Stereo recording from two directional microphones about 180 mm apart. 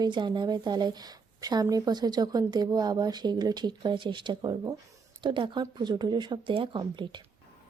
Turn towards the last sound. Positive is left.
turn(degrees=-25)  # may be behind; listen again after turning